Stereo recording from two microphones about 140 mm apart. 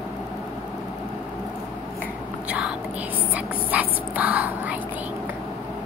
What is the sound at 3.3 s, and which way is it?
Speech, 10° right (ahead or behind).